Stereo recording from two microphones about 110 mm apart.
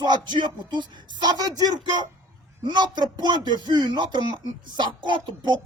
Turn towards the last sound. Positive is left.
turn(degrees=-45)  # may be behind; listen again after turning